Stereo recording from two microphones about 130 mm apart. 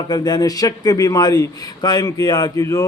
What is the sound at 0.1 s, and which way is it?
Speech, 30° left (ahead or behind).